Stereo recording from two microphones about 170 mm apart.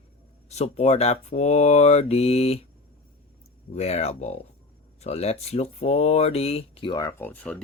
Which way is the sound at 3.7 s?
40° left (ahead or behind).